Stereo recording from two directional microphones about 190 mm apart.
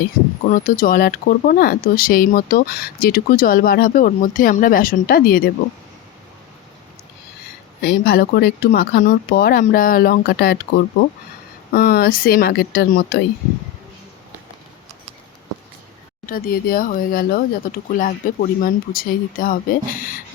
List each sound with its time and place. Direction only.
0.4 s speech: 45° left (ahead or behind)
7.8 s speech: 55° left (ahead or behind)
16.2 s speech: 50° left (ahead or behind)